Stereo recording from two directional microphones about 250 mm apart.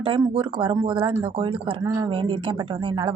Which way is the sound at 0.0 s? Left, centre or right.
Centre.